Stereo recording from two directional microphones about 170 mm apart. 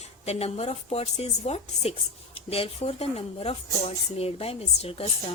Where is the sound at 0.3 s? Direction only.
40° left (ahead or behind).